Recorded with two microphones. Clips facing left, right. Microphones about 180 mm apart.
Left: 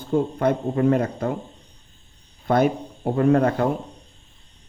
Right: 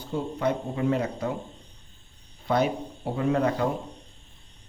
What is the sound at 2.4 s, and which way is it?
Speech, 50° left (ahead or behind).